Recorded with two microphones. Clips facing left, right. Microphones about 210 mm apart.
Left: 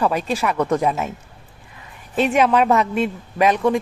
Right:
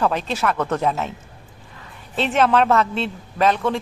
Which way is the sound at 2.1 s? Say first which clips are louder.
Left 1 dB; 10° left (ahead or behind).